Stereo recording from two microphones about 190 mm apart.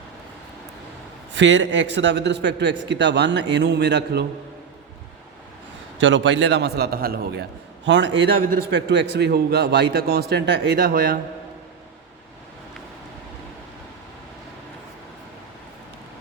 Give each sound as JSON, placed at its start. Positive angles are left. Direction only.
{"t": 1.3, "sound": "a man's voice", "side_deg": -75}
{"t": 6.0, "sound": "a man's voice", "side_deg": -75}
{"t": 7.9, "sound": "a man's voice", "side_deg": -70}
{"t": 10.8, "sound": "a man's voice", "side_deg": -50}